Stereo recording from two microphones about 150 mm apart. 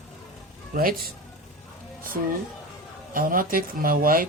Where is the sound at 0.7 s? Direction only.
70° right (ahead or behind).